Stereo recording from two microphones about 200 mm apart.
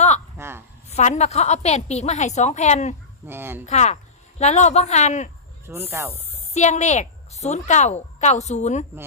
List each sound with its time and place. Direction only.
0.3 s a sound: 10° right (ahead or behind)
0.9 s a woman's voice: 35° left (ahead or behind)
3.2 s speech: 10° right (ahead or behind)
3.7 s a woman's voice: 35° left (ahead or behind)
5.6 s speech: 10° right (ahead or behind)
6.5 s a woman's voice: 35° left (ahead or behind)